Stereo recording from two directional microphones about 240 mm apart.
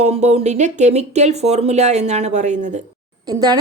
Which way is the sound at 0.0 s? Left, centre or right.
Right.